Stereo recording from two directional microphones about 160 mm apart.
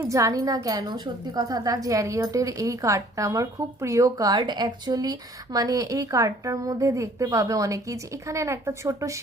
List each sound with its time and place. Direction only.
0.0 s a woman's voice: 20° right (ahead or behind)